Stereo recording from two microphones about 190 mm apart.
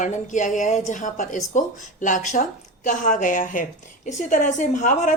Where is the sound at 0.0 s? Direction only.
40° left (ahead or behind).